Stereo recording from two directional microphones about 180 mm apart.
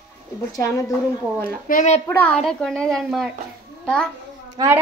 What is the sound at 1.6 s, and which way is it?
Speech, 45° left (ahead or behind).